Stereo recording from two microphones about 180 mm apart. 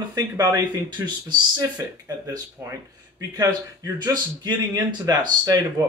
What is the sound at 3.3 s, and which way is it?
Speech, 20° right (ahead or behind).